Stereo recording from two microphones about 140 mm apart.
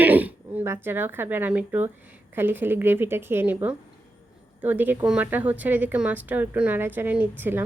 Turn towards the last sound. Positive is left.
turn(degrees=-15)  # may be behind; listen again after turning